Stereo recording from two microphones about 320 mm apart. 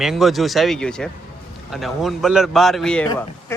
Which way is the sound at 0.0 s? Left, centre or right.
Centre.